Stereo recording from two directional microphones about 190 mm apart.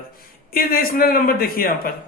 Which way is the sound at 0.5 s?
50° left (ahead or behind).